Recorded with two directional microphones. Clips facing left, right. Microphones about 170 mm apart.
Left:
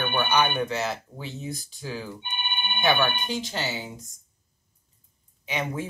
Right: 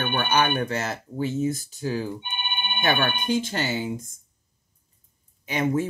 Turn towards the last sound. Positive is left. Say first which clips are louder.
# right 6 dB
turn(degrees=-50)  # may be behind; listen again after turning